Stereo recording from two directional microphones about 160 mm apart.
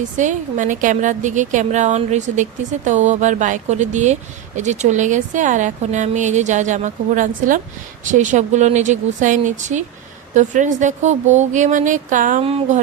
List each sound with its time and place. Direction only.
0.2 s a woman's voice: 50° right (ahead or behind)